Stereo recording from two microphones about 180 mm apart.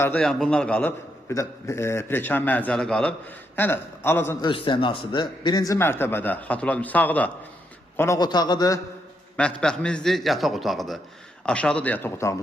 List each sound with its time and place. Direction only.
0.0 s a man's voice: 5° left (ahead or behind)
4.4 s a man's voice: 25° left (ahead or behind)
9.3 s a man's voice: 5° left (ahead or behind)